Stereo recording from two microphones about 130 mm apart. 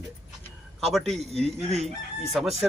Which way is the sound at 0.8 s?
Centre (ahead or behind).